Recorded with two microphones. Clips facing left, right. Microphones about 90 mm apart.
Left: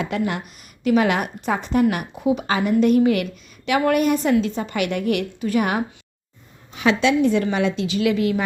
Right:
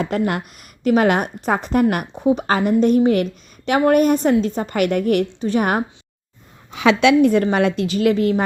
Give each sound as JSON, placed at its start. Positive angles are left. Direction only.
{"t": 0.0, "sound": "a woman's voice", "side_deg": -45}
{"t": 2.1, "sound": "a woman's voice", "side_deg": -35}
{"t": 5.3, "sound": "a woman's voice", "side_deg": -30}
{"t": 6.7, "sound": "a woman's voice", "side_deg": -85}